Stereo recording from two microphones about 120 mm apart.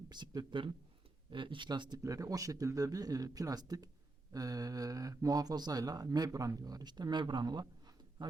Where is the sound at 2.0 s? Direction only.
30° right (ahead or behind).